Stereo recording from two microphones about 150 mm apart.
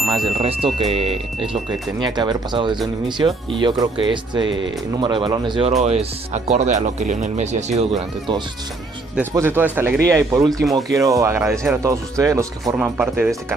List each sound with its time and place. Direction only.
0.0 s music: centre (ahead or behind)
0.4 s speech: 40° right (ahead or behind)
5.7 s speech: 45° right (ahead or behind)
9.3 s speech: 15° right (ahead or behind)
12.7 s speech: 10° right (ahead or behind)